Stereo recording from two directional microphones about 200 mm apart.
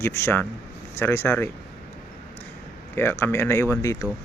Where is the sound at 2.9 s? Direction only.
10° left (ahead or behind).